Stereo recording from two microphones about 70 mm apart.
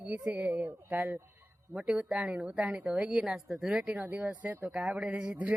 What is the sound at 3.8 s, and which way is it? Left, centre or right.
Speech, right.